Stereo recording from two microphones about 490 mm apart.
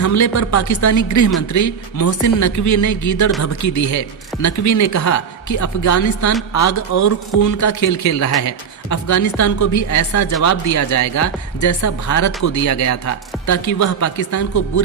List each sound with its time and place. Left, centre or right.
0.0 s speech: left